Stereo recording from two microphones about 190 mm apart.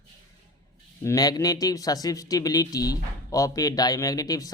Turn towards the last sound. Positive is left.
turn(degrees=20)  # may be behind; listen again after turning